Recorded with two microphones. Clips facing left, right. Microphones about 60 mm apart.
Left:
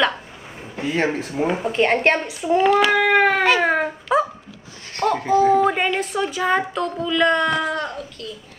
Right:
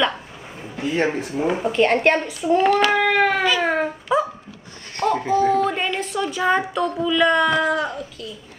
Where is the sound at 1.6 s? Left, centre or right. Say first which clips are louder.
Right 2 dB; centre.